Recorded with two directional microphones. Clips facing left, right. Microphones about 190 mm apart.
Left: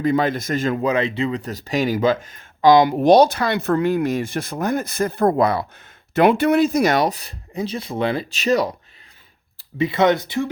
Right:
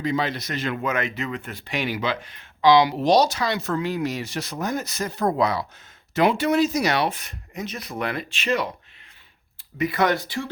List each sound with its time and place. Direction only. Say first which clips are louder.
0.0 s speech: left 6 dB; 50° left (ahead or behind)
0.8 s speech: left 6 dB; 30° left (ahead or behind)
9.6 s speech: left 4 dB; 30° left (ahead or behind)